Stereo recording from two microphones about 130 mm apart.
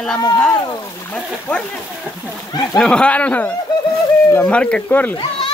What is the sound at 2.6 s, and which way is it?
A man's voice, 5° left (ahead or behind).